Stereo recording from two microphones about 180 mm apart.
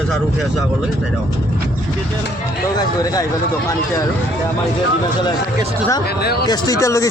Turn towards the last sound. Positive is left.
turn(degrees=15)  # may be behind; listen again after turning